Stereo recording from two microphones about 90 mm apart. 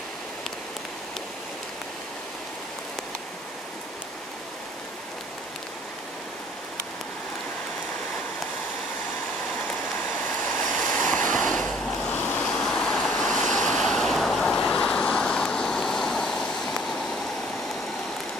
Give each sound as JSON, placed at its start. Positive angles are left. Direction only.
{"t": 10.2, "sound": "waves", "side_deg": 20}